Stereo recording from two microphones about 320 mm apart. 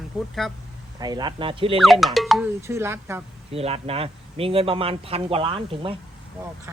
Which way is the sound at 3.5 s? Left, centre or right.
Centre.